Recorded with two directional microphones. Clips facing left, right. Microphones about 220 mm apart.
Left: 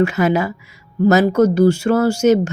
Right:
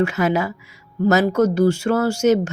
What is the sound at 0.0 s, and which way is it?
Speech, 15° left (ahead or behind).